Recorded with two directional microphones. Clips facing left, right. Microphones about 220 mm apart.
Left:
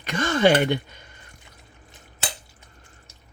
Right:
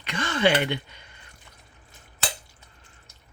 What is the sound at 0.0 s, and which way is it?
Speech, 45° left (ahead or behind).